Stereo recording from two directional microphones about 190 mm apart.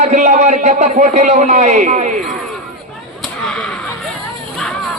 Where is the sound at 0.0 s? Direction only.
40° right (ahead or behind).